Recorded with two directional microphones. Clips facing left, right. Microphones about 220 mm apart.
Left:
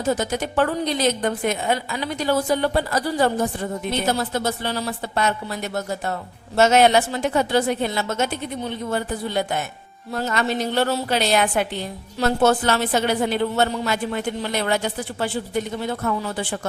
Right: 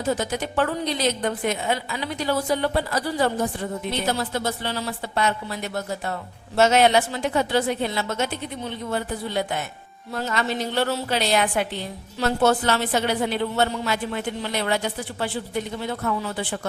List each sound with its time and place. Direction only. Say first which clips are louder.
0.2 s a woman's voice: left 3 dB; 45° left (ahead or behind)